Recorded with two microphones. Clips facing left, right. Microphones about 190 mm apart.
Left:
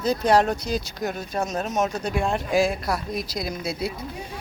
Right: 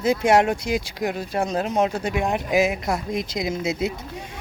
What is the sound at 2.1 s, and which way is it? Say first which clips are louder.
Speech: right 1 dB; 15° right (ahead or behind).